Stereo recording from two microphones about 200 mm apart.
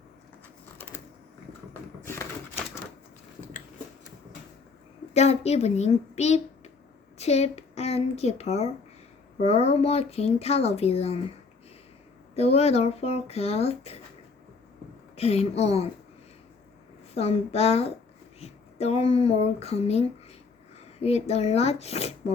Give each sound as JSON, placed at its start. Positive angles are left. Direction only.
{"t": 0.8, "sound": "typing", "side_deg": 10}
{"t": 5.1, "sound": "speech", "side_deg": 30}
{"t": 12.3, "sound": "speech", "side_deg": 30}
{"t": 15.1, "sound": "speech", "side_deg": 30}
{"t": 17.2, "sound": "speech", "side_deg": 30}